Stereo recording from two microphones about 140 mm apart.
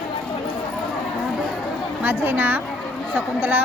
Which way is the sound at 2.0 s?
15° right (ahead or behind).